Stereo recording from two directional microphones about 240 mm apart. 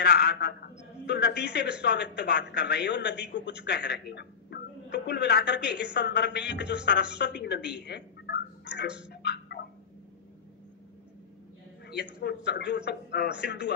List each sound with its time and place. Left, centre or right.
0.0 s a man's voice: left
9.1 s tick-tock: left
12.2 s a man's voice: left